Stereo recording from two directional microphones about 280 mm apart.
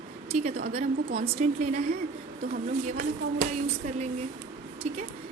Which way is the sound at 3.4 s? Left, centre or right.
Right.